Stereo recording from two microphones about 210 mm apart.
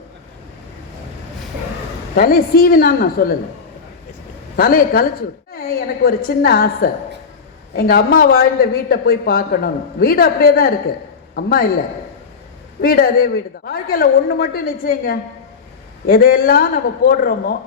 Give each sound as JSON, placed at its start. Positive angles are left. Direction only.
{"t": 2.1, "sound": "speech", "side_deg": 45}
{"t": 4.5, "sound": "speech", "side_deg": 45}
{"t": 12.8, "sound": "speech", "side_deg": 45}